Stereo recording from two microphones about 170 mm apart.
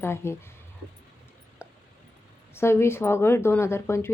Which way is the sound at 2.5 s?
15° left (ahead or behind).